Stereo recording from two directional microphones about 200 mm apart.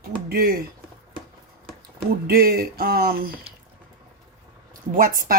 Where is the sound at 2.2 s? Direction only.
50° right (ahead or behind).